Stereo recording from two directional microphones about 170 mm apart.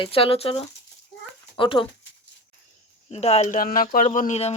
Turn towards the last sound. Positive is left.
turn(degrees=45)  # may be behind; listen again after turning